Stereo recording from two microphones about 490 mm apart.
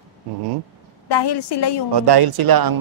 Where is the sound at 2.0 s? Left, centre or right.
Right.